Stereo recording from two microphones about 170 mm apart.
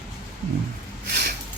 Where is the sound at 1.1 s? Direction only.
70° right (ahead or behind).